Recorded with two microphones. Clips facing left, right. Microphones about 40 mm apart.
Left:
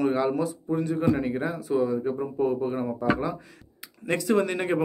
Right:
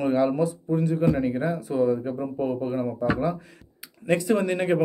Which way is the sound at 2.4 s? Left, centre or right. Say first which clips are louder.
Left 2 dB; centre.